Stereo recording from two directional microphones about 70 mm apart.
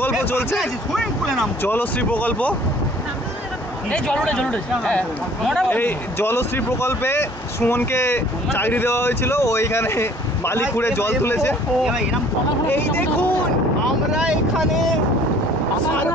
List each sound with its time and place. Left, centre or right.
0.2 s speech: left
0.6 s speech: centre
1.6 s speech: left
4.2 s speech: centre
5.7 s speech: left
11.8 s speech: centre
12.6 s speech: left
14.1 s speech: centre